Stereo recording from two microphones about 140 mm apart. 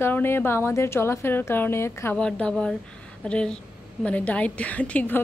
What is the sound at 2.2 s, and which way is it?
A woman's voice, 5° left (ahead or behind).